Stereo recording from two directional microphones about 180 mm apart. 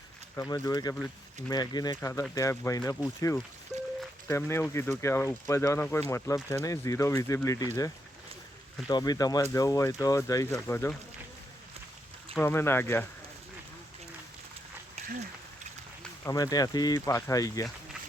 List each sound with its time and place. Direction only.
0.3 s speech: 20° left (ahead or behind)
3.7 s music: centre (ahead or behind)
4.3 s speech: 15° left (ahead or behind)
12.3 s speech: 10° left (ahead or behind)
16.2 s speech: 20° left (ahead or behind)